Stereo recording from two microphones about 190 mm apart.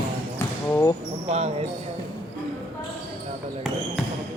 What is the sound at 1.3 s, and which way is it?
Speech, 35° right (ahead or behind).